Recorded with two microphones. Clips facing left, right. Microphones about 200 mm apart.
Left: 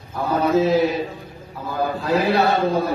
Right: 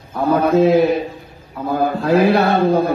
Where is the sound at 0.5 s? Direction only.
55° right (ahead or behind).